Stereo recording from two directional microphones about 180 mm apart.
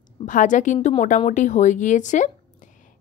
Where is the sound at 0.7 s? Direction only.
30° left (ahead or behind).